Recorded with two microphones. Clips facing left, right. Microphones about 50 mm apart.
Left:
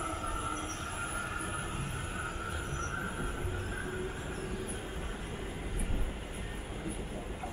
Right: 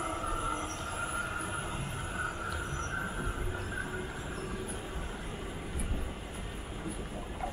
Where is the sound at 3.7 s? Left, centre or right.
Right.